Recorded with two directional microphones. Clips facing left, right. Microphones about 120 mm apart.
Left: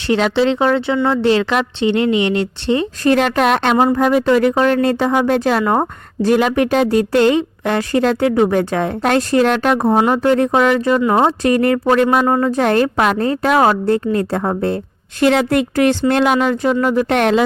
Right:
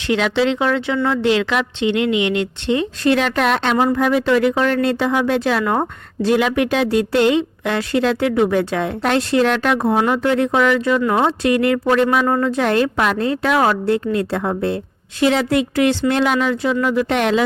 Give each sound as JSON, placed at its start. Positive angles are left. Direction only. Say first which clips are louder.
{"t": 0.1, "sound": "a woman's voice", "louder": "left 3 dB", "side_deg": 35}
{"t": 11.0, "sound": "speech", "louder": "left 3 dB", "side_deg": 30}
{"t": 11.3, "sound": "a woman's voice", "louder": "left 2 dB", "side_deg": 45}
{"t": 12.5, "sound": "speech", "louder": "left 2 dB", "side_deg": 40}
{"t": 15.2, "sound": "speech", "louder": "left 2 dB", "side_deg": 55}